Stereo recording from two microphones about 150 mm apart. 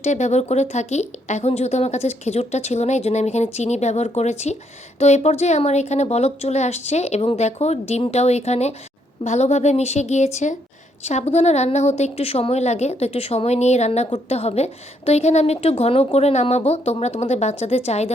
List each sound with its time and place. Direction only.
0.0 s a woman's voice: 50° left (ahead or behind)